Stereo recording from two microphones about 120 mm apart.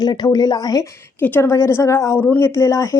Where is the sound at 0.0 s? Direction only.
35° left (ahead or behind).